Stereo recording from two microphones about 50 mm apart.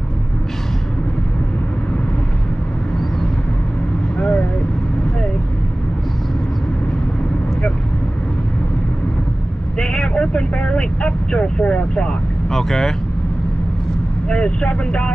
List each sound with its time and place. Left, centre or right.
4.2 s vehicle: left
9.8 s vehicle: centre
12.5 s speech: centre
14.3 s speech: left